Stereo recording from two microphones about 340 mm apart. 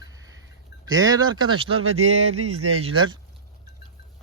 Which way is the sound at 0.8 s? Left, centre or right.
Centre.